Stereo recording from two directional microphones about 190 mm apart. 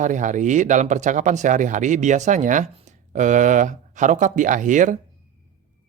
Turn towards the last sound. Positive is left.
turn(degrees=-40)  # may be behind; listen again after turning